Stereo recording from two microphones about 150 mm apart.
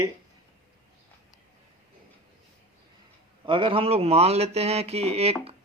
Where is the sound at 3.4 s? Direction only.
35° right (ahead or behind).